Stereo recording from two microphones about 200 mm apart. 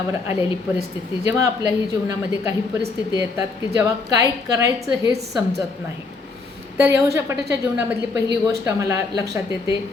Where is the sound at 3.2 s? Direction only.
15° right (ahead or behind).